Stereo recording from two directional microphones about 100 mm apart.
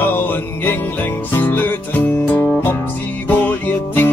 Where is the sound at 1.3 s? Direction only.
20° left (ahead or behind).